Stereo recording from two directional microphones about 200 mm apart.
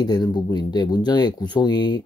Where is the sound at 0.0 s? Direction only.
20° left (ahead or behind).